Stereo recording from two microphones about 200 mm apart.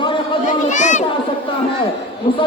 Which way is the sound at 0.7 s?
35° left (ahead or behind).